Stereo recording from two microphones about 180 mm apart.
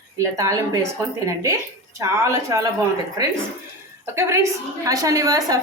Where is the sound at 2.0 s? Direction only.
15° right (ahead or behind).